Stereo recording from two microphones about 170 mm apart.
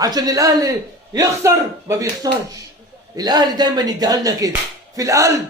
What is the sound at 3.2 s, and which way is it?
A man's voice, 25° right (ahead or behind).